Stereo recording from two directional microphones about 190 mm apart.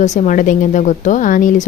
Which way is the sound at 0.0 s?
40° left (ahead or behind).